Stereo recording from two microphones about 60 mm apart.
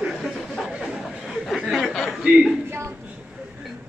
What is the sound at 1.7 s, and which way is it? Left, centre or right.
Speech, centre.